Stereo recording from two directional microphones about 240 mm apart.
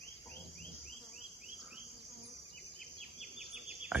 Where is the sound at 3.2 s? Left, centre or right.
Centre.